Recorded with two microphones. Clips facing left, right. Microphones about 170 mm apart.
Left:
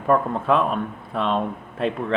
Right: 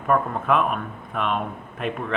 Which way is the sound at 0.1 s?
30° left (ahead or behind).